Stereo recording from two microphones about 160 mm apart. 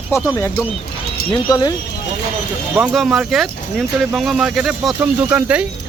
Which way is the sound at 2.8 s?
Centre (ahead or behind).